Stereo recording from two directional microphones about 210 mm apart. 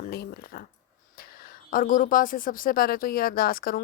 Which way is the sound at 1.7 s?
40° left (ahead or behind).